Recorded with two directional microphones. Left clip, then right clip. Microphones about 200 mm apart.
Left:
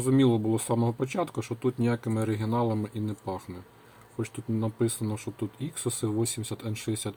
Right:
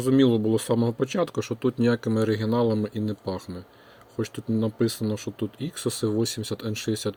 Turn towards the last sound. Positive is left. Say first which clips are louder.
# right 5 dB
turn(degrees=-20)  # may be behind; listen again after turning